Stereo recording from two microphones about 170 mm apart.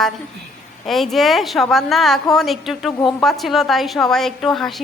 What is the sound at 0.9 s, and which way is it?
A woman's voice, centre (ahead or behind).